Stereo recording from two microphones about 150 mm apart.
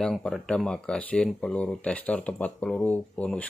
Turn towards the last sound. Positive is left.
turn(degrees=10)  # may be behind; listen again after turning